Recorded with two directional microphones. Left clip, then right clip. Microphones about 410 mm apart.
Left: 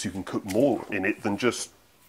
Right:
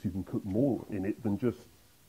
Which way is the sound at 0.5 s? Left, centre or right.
Left.